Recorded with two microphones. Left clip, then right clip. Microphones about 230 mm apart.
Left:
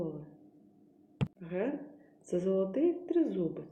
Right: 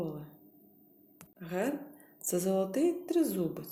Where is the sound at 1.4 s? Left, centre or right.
Right.